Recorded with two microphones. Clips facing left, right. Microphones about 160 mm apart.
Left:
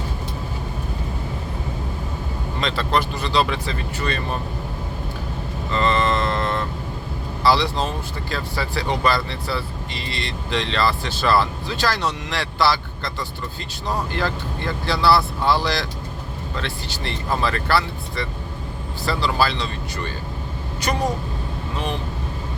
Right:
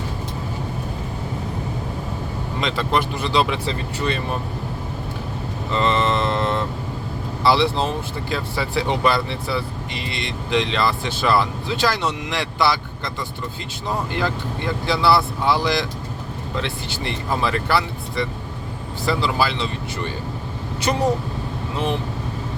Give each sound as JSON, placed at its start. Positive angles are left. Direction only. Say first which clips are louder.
{"t": 2.6, "sound": "speech", "louder": "even", "side_deg": -15}
{"t": 5.7, "sound": "a sound", "louder": "even", "side_deg": -20}
{"t": 7.4, "sound": "speech", "louder": "right 1 dB", "side_deg": -25}
{"t": 14.1, "sound": "speech", "louder": "right 1 dB", "side_deg": -15}
{"t": 20.9, "sound": "speech", "louder": "right 2 dB", "side_deg": -15}